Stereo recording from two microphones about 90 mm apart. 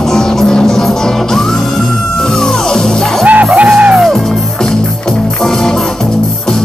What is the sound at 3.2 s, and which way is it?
Music, 15° right (ahead or behind).